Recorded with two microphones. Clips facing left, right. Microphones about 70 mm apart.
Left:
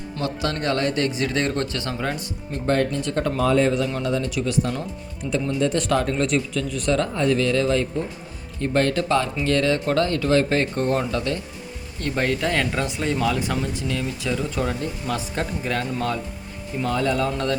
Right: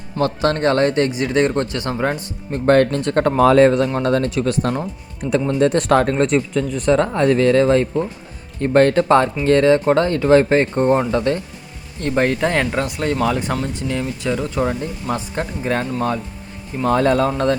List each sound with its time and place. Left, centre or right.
0.2 s speech: right
2.5 s speech: right
4.3 s speech: right
7.1 s speech: right
12.0 s speech: right
13.0 s speech: centre
13.2 s speech: centre
16.8 s speech: right